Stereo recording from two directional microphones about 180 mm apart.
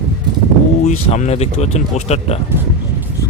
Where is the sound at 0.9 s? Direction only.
40° left (ahead or behind).